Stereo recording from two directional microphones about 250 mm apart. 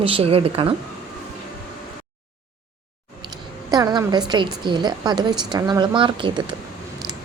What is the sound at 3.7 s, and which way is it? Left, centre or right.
A woman's voice, centre.